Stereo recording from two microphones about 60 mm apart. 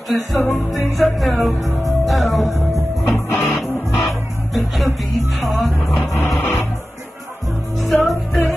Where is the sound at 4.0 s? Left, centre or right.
Centre.